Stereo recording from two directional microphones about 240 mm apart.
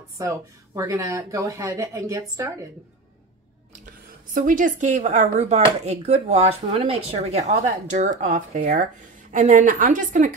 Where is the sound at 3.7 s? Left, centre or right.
Right.